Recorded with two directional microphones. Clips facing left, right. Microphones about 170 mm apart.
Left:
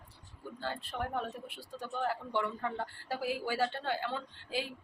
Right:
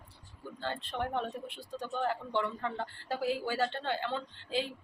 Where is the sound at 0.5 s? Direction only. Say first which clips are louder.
Right 2 dB; 10° left (ahead or behind).